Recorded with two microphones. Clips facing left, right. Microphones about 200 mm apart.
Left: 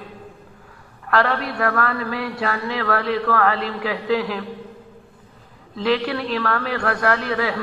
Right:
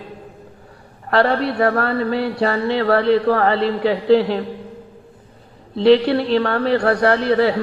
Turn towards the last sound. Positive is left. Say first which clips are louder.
# right 6 dB
turn(degrees=-35)  # may be behind; listen again after turning